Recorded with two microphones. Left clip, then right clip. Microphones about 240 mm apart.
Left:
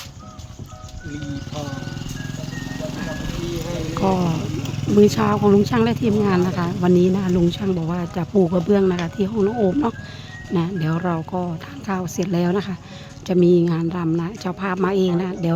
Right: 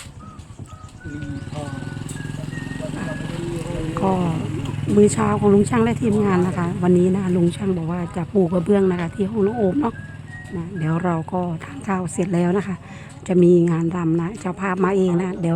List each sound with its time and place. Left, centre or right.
2.6 s vehicle: left
3.5 s music: left
3.9 s speech: centre